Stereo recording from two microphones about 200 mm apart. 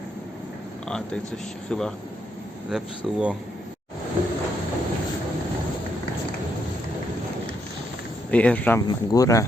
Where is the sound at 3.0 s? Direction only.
5° right (ahead or behind).